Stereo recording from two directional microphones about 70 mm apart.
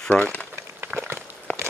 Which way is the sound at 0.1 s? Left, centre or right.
Centre.